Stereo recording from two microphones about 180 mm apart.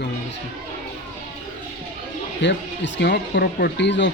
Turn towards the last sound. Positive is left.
turn(degrees=80)